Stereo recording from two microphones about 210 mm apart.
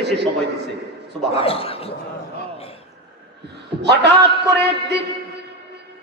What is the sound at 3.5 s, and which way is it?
Speech, 55° right (ahead or behind).